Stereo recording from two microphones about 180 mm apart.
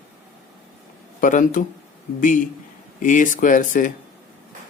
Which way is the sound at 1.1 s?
45° left (ahead or behind).